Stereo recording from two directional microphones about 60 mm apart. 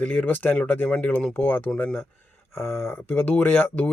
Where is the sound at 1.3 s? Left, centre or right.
Left.